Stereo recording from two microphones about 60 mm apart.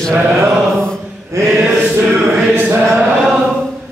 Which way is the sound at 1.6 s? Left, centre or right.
Right.